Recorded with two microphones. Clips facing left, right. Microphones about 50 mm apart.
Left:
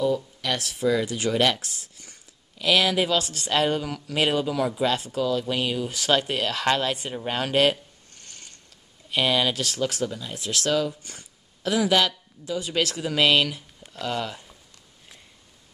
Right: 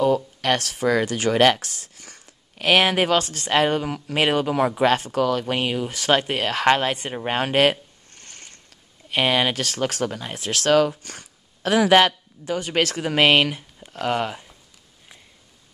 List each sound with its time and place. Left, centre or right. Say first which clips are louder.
0.0 s speech: right 5 dB; right
2.5 s speech: right 3 dB; right
8.1 s mechanisms: right 3 dB; right
9.1 s speech: right 2 dB; right
11.6 s speech: right 6 dB; right